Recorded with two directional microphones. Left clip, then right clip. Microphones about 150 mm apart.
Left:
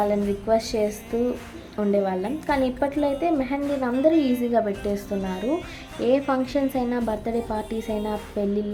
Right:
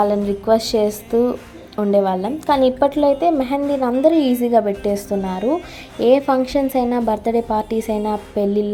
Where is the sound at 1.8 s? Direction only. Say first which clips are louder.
Right 7 dB; 25° right (ahead or behind).